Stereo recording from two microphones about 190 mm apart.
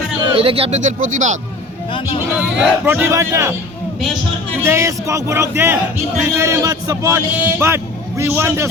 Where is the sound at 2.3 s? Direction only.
10° right (ahead or behind).